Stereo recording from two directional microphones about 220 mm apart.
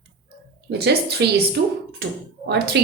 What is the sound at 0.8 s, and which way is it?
A woman's voice, 50° right (ahead or behind).